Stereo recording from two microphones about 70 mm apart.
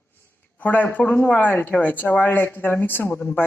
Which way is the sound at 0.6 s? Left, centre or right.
Left.